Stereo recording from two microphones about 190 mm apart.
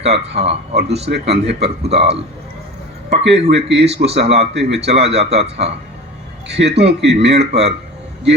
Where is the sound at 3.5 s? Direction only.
60° right (ahead or behind).